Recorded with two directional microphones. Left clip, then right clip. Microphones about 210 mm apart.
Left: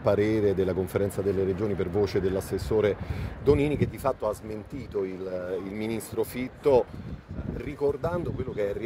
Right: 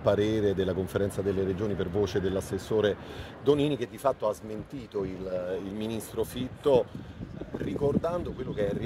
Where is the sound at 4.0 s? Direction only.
20° left (ahead or behind).